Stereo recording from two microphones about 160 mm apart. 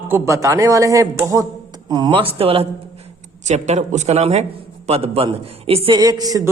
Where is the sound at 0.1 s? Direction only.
20° right (ahead or behind).